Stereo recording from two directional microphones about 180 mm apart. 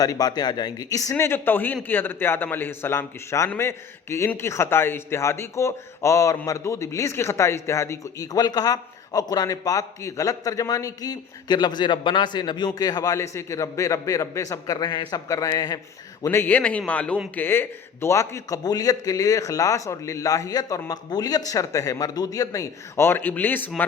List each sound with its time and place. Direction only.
0.0 s a man's voice: 20° left (ahead or behind)